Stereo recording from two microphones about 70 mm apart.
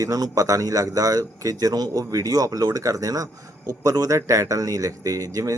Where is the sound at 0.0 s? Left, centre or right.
Right.